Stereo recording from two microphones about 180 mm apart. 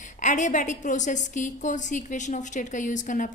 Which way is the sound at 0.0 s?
45° left (ahead or behind).